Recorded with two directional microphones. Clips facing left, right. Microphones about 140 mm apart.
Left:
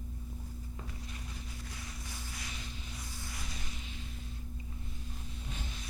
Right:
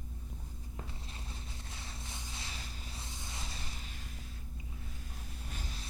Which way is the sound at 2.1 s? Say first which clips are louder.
Left 1 dB; 25° right (ahead or behind).